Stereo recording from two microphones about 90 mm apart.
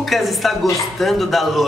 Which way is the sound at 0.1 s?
Centre (ahead or behind).